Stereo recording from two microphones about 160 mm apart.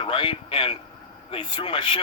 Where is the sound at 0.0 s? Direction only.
30° left (ahead or behind).